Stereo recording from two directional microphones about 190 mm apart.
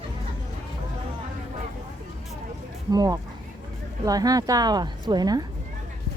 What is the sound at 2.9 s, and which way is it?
A woman's voice, 20° right (ahead or behind).